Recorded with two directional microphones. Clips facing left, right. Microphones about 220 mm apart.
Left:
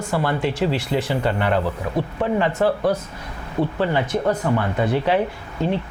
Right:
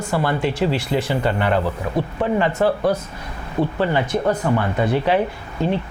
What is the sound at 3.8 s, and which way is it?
Speech, 15° right (ahead or behind).